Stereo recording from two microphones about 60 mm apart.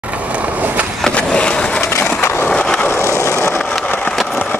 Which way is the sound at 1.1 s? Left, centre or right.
Centre.